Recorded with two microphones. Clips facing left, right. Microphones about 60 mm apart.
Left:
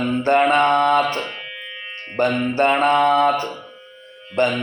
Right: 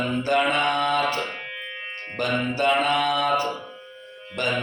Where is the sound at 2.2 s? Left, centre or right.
Left.